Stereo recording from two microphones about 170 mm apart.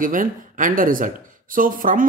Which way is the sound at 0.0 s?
50° right (ahead or behind).